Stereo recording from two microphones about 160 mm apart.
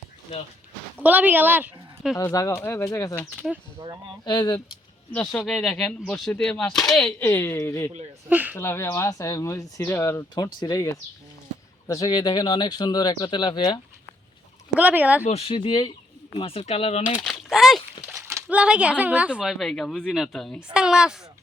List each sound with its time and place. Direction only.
0.9 s speech: 10° right (ahead or behind)
2.1 s speech: 20° left (ahead or behind)
2.6 s speech: 10° left (ahead or behind)
3.2 s speech: 5° right (ahead or behind)
4.3 s speech: 30° left (ahead or behind)
5.1 s speech: 5° left (ahead or behind)
7.3 s speech: 15° left (ahead or behind)
8.3 s speech: 10° right (ahead or behind)
8.5 s speech: 15° left (ahead or behind)
14.8 s speech: 10° right (ahead or behind)
15.2 s speech: 40° left (ahead or behind)
17.2 s a sound: centre (ahead or behind)
18.2 s speech: 15° right (ahead or behind)